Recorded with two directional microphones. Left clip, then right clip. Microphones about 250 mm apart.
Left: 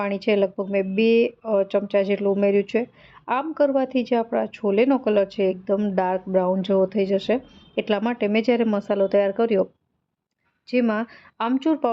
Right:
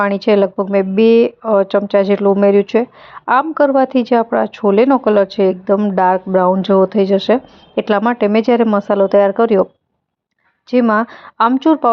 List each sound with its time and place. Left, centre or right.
0.0 s a woman's voice: centre
10.7 s a woman's voice: centre